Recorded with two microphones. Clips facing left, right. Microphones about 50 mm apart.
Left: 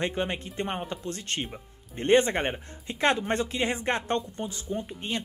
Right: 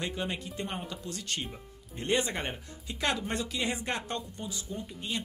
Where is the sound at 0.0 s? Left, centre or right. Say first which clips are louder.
Left 5 dB; left.